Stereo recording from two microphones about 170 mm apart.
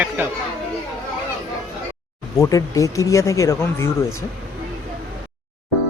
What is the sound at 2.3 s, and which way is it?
Speech, 20° left (ahead or behind).